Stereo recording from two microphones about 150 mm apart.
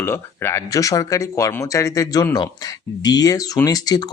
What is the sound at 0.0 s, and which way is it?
Speech, 15° left (ahead or behind).